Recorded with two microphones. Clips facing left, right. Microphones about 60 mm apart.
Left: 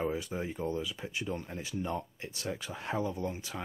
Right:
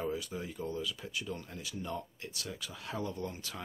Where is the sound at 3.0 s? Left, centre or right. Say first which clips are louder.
Left 4 dB; centre.